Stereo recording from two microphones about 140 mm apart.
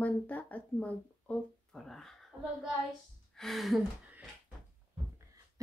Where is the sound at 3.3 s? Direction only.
Centre (ahead or behind).